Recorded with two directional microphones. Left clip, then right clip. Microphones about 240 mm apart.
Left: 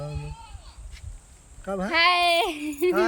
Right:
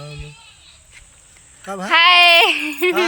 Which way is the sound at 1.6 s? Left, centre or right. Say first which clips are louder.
Right 2 dB; centre.